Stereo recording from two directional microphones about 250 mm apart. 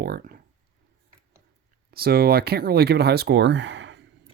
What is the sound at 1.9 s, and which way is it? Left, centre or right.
Speech, right.